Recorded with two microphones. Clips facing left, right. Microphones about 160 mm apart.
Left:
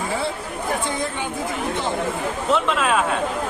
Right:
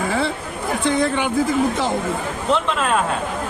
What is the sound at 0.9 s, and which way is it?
Speech, 80° right.